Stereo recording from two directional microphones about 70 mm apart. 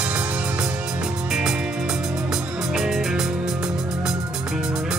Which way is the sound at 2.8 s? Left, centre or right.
Centre.